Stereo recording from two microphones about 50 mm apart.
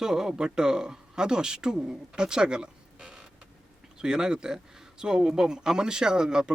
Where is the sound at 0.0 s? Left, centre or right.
Centre.